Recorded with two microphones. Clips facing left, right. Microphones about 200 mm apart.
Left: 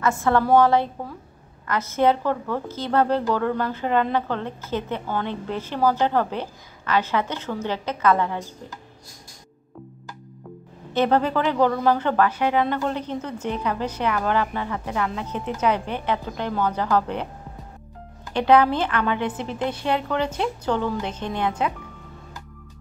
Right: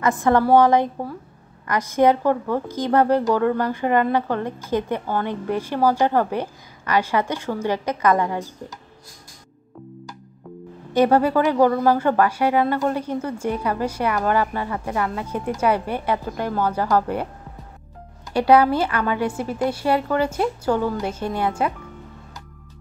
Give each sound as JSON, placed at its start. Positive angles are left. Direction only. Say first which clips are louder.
{"t": 0.0, "sound": "a woman's voice", "louder": "right 3 dB", "side_deg": -15}
{"t": 10.9, "sound": "a woman's voice", "louder": "right 4 dB", "side_deg": -10}
{"t": 18.3, "sound": "a woman's voice", "louder": "right 2 dB", "side_deg": -10}